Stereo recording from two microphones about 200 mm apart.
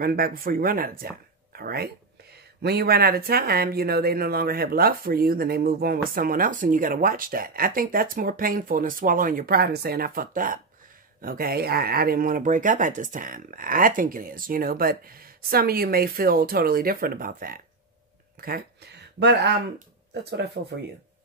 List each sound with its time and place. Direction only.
0.0 s speech: 50° right (ahead or behind)
20.6 s speech: 60° right (ahead or behind)